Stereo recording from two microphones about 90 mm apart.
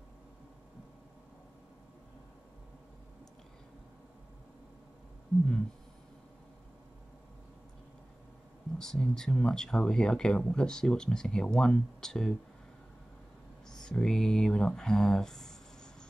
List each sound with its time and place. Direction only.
8.7 s speech: 5° left (ahead or behind)
13.7 s speech: 5° left (ahead or behind)